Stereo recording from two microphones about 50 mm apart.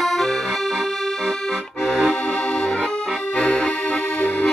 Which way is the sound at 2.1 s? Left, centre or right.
Centre.